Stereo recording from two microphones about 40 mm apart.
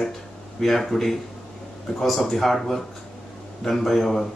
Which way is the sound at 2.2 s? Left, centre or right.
Centre.